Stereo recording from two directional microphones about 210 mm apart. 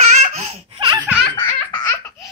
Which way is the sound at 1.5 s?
10° left (ahead or behind).